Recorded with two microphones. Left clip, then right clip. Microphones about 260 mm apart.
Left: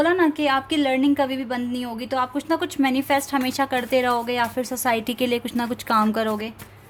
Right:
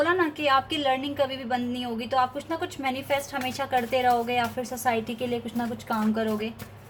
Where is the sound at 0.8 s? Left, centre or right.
Left.